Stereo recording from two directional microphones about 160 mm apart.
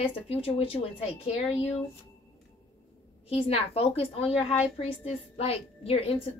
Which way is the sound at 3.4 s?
40° left (ahead or behind).